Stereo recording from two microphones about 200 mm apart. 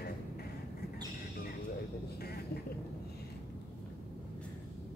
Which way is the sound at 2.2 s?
50° left (ahead or behind).